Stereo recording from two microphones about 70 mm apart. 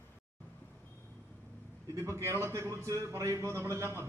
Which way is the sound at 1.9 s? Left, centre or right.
Right.